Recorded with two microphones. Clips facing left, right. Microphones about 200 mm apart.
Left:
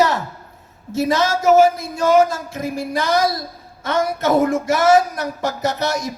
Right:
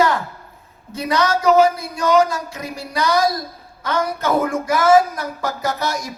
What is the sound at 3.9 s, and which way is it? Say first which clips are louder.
A man's voice: left 2 dB; 25° left (ahead or behind).